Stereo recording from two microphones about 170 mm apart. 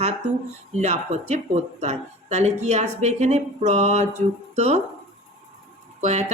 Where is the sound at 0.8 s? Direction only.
40° right (ahead or behind).